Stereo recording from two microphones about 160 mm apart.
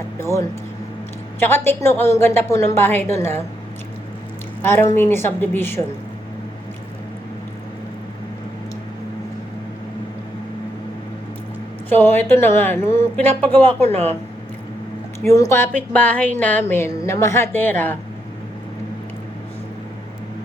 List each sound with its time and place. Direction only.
1.4 s a woman's voice: 15° left (ahead or behind)
4.6 s a woman's voice: 15° left (ahead or behind)
11.9 s a woman's voice: 10° left (ahead or behind)
13.8 s speech: 40° right (ahead or behind)
15.2 s a woman's voice: 20° left (ahead or behind)